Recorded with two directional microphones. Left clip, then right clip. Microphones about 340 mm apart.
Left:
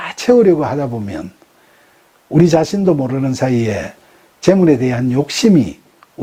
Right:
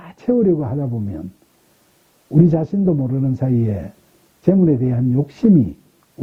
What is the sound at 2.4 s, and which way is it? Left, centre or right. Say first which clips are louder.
Speech: left 9 dB; centre.